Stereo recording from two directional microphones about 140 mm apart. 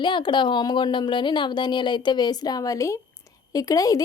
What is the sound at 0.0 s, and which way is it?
Speech, 35° left (ahead or behind).